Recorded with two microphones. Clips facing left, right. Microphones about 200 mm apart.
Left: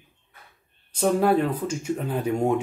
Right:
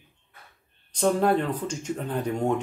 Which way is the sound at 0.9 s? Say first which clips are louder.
Left 2 dB; 10° left (ahead or behind).